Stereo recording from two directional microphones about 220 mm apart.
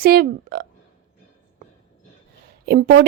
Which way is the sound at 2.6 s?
45° right (ahead or behind).